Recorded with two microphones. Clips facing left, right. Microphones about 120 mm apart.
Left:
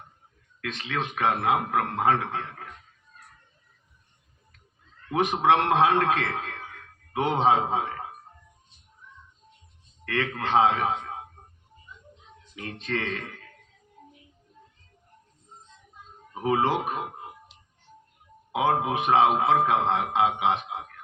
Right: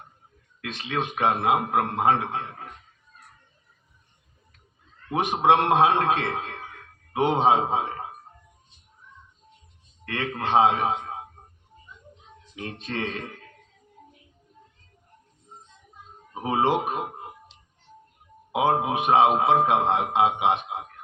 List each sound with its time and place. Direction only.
0.6 s speech: 20° right (ahead or behind)
5.1 s a man's voice: 20° right (ahead or behind)
10.1 s speech: 20° right (ahead or behind)
12.5 s speech: 20° right (ahead or behind)
16.3 s speech: 20° right (ahead or behind)
18.5 s speech: 20° right (ahead or behind)